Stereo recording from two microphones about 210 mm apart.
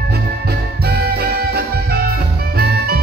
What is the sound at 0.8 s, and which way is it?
Music, 50° right (ahead or behind).